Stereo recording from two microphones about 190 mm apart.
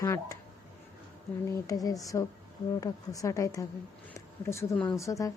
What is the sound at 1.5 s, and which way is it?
A woman's voice, 20° left (ahead or behind).